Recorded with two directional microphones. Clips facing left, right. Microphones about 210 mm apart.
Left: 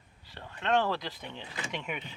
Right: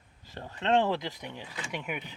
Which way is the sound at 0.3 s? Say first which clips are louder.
Right 2 dB; 40° right (ahead or behind).